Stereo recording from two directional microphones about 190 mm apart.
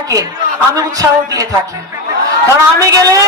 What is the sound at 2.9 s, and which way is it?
Speech, 20° right (ahead or behind).